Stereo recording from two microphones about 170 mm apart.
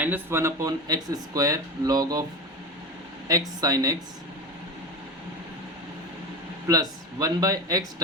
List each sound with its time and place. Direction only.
0.0 s speech: 15° right (ahead or behind)
3.2 s speech: 20° right (ahead or behind)
6.7 s speech: 20° right (ahead or behind)